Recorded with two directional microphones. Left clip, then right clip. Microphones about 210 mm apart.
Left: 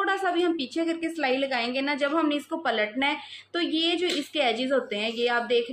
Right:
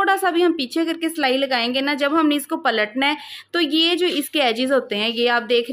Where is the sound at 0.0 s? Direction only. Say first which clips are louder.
Right 7 dB; 50° right (ahead or behind).